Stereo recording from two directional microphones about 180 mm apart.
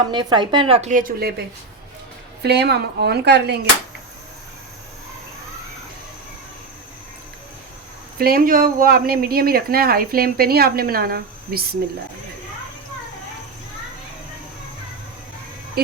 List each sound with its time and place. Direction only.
0.1 s speech: 25° right (ahead or behind); by 1.3 s 50° right (ahead or behind)
2.4 s speech: 65° right (ahead or behind)
8.2 s speech: 55° right (ahead or behind)